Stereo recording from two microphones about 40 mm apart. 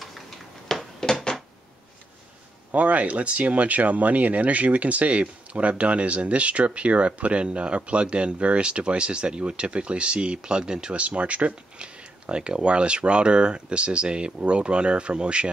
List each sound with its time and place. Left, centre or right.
0.7 s a sound: centre
2.7 s speech: right
11.0 s speech: right